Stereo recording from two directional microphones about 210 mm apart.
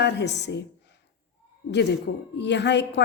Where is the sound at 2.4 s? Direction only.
55° left (ahead or behind).